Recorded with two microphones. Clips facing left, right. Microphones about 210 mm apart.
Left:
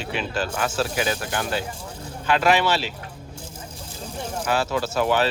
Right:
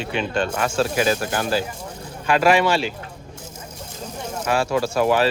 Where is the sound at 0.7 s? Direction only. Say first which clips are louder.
Right 6 dB; 25° right (ahead or behind).